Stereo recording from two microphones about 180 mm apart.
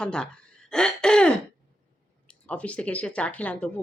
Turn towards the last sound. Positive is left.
turn(degrees=10)  # may be behind; listen again after turning